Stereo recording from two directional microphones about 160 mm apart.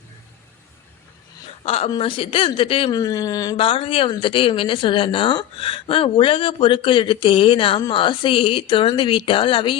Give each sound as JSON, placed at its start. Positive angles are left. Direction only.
{"t": 1.6, "sound": "speech", "side_deg": 35}
{"t": 3.0, "sound": "speech", "side_deg": 20}
{"t": 3.6, "sound": "speech", "side_deg": 35}